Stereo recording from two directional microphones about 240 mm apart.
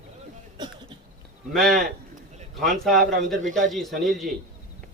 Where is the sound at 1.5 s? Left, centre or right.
Centre.